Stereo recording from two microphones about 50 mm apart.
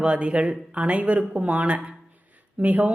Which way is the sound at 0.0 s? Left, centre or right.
Right.